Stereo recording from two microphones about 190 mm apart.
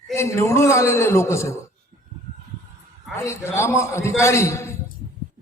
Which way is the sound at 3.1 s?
15° left (ahead or behind).